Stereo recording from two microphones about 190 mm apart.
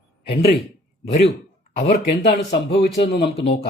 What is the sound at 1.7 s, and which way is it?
A man's voice, 55° left (ahead or behind).